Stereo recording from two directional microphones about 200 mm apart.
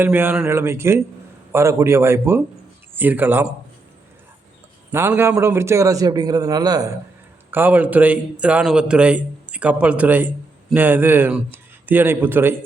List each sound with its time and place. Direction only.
0.0 s a man's voice: 10° right (ahead or behind)
4.9 s a man's voice: 10° right (ahead or behind)
7.5 s a man's voice: 10° right (ahead or behind)